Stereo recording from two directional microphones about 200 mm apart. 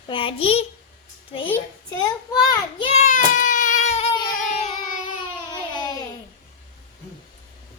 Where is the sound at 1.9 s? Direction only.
20° left (ahead or behind).